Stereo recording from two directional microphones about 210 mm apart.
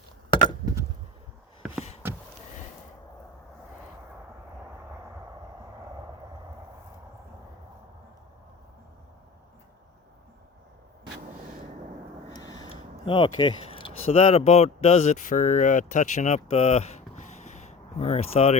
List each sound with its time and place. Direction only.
0.3 s chop: 25° left (ahead or behind)
2.0 s a sound: 10° right (ahead or behind)
12.3 s speech: 20° left (ahead or behind)